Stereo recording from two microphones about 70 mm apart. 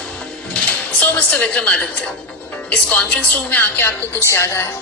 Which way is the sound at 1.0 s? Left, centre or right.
Left.